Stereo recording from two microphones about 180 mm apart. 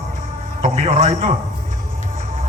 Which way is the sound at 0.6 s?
40° right (ahead or behind).